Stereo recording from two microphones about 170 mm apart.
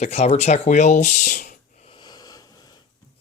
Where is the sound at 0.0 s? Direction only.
40° left (ahead or behind).